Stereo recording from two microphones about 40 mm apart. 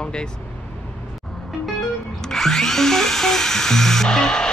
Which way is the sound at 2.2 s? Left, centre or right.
Centre.